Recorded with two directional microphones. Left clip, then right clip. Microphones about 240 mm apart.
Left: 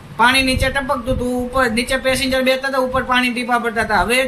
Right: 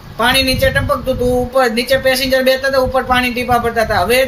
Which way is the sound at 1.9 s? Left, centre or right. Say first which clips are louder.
Right 5 dB; left.